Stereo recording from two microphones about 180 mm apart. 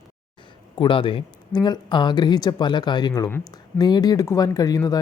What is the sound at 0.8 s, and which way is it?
Speech, 30° left (ahead or behind).